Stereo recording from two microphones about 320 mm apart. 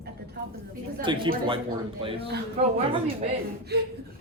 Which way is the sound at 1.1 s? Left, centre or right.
Centre.